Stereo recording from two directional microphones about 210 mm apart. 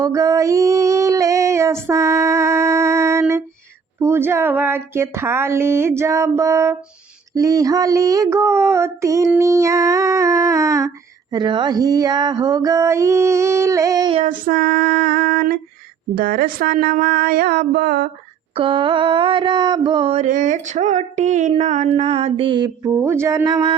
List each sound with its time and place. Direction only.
0.0 s female singing: 15° right (ahead or behind)
14.2 s speech: 40° right (ahead or behind)
18.5 s a sound: 25° right (ahead or behind)